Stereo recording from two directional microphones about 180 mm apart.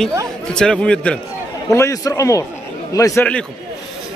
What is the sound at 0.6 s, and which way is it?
Speech, 5° left (ahead or behind).